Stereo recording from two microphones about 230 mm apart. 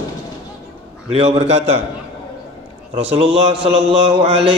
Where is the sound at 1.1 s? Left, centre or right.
Right.